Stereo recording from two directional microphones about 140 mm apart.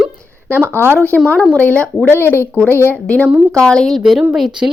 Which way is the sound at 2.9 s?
10° left (ahead or behind).